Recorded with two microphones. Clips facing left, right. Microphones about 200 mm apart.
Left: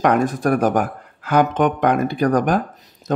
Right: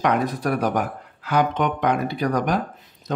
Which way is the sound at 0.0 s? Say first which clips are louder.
Left 4 dB; 50° left (ahead or behind).